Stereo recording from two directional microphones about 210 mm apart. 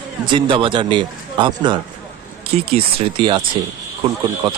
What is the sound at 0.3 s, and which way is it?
Speech, 25° right (ahead or behind).